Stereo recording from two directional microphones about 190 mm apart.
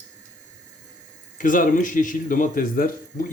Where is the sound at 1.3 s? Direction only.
45° left (ahead or behind).